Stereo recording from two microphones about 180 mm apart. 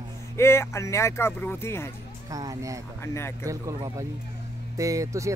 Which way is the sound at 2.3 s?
20° right (ahead or behind).